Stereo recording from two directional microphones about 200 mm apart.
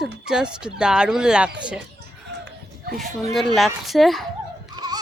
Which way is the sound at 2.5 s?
50° right (ahead or behind).